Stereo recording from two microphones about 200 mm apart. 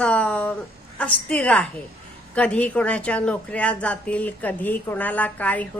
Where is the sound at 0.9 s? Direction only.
5° left (ahead or behind).